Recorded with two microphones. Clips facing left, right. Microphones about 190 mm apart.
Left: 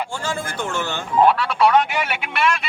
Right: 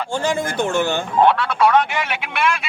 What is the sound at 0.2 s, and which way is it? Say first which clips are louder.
Speech: right 6 dB; 20° right (ahead or behind).